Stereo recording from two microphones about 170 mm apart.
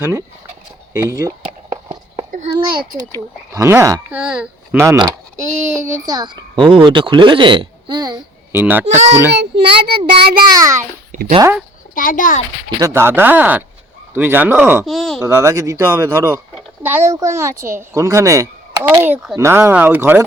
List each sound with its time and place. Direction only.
0.0 s speech: 15° right (ahead or behind)
1.7 s a sound: 25° right (ahead or behind)
3.5 s speech: 15° right (ahead or behind)
4.1 s speech: 5° right (ahead or behind); by 8.2 s 25° right (ahead or behind)
8.5 s speech: 10° right (ahead or behind)
9.3 s a child's voice: 80° right
10.2 s a child's voice: 65° right (ahead or behind)
10.5 s speech: 20° right (ahead or behind)
11.9 s a child's voice: 55° left (ahead or behind)
12.8 s speech: 15° right (ahead or behind)
14.8 s speech: centre (ahead or behind)
15.2 s speech: 15° right (ahead or behind)